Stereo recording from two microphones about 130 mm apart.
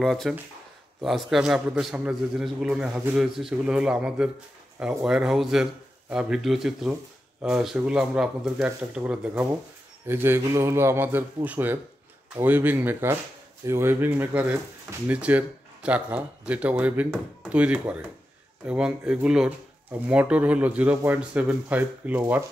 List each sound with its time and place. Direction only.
0.0 s a man's voice: centre (ahead or behind)